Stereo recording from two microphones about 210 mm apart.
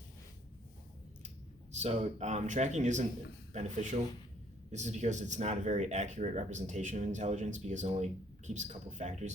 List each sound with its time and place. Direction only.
1.7 s speech: 30° right (ahead or behind)